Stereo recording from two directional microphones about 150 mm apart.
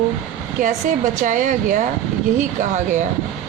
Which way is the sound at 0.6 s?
60° right (ahead or behind).